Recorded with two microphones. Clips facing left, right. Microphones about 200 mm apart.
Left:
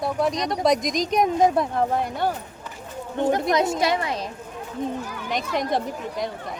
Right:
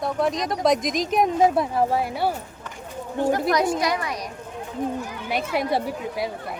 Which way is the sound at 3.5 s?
25° left (ahead or behind).